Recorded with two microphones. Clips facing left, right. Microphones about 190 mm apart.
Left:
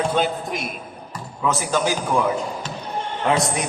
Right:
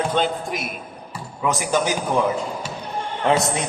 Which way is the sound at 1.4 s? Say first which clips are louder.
Even; 15° right (ahead or behind).